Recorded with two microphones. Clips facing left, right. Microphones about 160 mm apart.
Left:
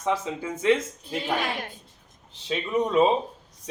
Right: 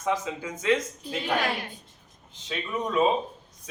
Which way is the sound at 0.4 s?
30° left (ahead or behind).